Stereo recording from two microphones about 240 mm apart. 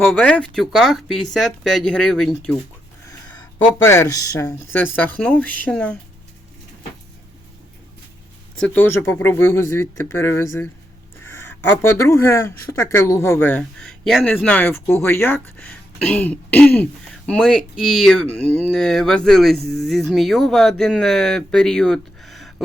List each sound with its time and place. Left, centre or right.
0.0 s speech: centre
3.8 s speech: centre
8.6 s speech: centre